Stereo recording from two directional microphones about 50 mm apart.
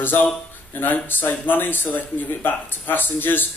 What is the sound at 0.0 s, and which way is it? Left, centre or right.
Speech, left.